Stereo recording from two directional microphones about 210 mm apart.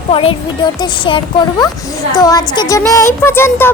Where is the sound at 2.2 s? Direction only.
20° left (ahead or behind).